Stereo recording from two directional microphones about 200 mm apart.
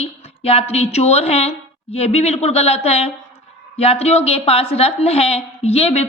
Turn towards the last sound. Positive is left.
turn(degrees=30)  # may be behind; listen again after turning